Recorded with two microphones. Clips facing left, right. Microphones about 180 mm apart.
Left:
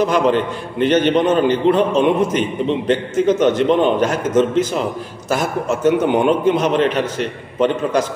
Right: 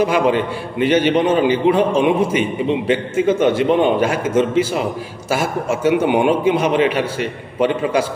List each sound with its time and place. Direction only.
0.0 s a man's voice: 10° right (ahead or behind)